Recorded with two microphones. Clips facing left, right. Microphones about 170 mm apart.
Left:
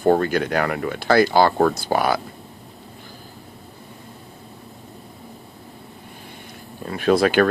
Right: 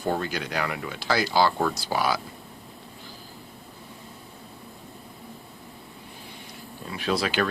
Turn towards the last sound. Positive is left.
turn(degrees=55)  # may be behind; listen again after turning